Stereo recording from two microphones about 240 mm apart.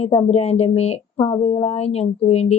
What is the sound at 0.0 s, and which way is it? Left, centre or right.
Speech, left.